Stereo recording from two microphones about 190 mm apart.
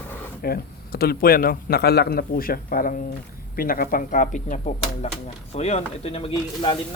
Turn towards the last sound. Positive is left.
turn(degrees=30)  # may be behind; listen again after turning